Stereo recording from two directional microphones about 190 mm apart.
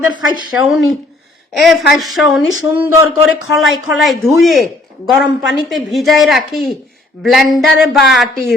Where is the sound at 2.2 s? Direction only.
80° left.